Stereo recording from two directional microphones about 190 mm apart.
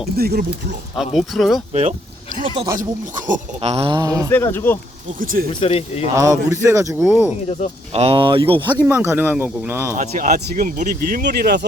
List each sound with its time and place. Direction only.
0.2 s speech: 50° right (ahead or behind)
0.9 s speech: centre (ahead or behind)
1.7 s speech: 35° right (ahead or behind); by 4.3 s 20° right (ahead or behind)
4.3 s speech: 10° left (ahead or behind)
5.2 s speech: 45° right (ahead or behind)
5.5 s speech: 30° left (ahead or behind)
6.1 s speech: 15° right (ahead or behind)
7.9 s speech: 30° right (ahead or behind)
8.8 s speech: 10° right (ahead or behind)
10.0 s speech: 45° right (ahead or behind); by 11.6 s 60° right (ahead or behind)